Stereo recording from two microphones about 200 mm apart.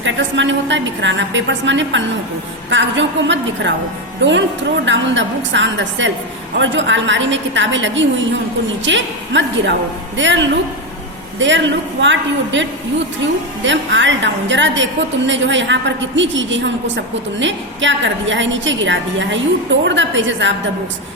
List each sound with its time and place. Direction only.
0.0 s a woman's voice: 65° right (ahead or behind)